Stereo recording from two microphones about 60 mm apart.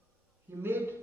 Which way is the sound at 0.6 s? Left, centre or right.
Right.